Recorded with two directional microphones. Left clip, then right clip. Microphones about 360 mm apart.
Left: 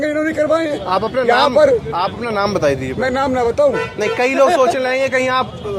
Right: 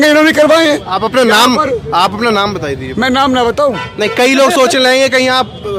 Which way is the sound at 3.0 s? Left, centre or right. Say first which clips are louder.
Right 6 dB; right.